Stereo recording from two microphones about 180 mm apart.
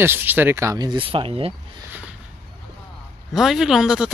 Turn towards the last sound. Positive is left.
turn(degrees=-5)  # may be behind; listen again after turning